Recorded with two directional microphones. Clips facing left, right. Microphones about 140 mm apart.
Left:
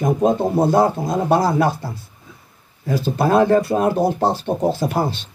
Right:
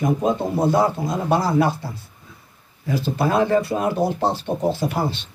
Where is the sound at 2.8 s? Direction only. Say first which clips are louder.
Left 3 dB; 40° left (ahead or behind).